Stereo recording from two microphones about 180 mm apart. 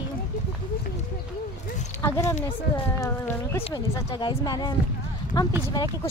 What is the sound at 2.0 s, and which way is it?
Speech, 15° left (ahead or behind).